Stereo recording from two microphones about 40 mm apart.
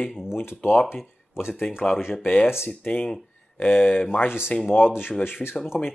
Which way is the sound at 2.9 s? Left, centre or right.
Left.